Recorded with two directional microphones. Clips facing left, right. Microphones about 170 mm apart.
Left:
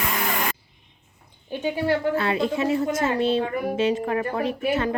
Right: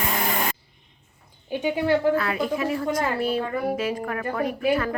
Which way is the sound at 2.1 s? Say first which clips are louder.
Left 1 dB; 25° left (ahead or behind).